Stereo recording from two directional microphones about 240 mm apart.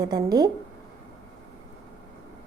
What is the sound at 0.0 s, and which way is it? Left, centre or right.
Speech, centre.